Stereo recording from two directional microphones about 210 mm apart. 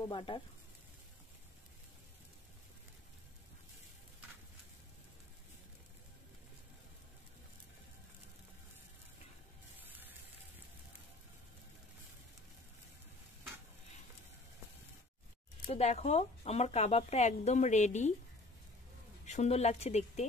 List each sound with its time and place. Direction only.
0.1 s speech: 25° left (ahead or behind)
9.8 s a sound: 10° right (ahead or behind)
15.7 s speech: 30° left (ahead or behind)
19.2 s speech: 30° left (ahead or behind)